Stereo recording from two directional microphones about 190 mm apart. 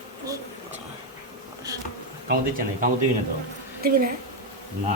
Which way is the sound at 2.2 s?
50° right (ahead or behind).